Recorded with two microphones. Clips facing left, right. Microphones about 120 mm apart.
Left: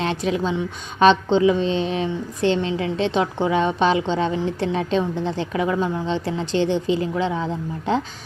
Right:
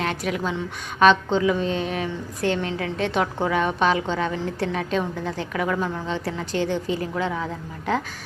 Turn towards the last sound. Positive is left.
turn(degrees=25)  # may be behind; listen again after turning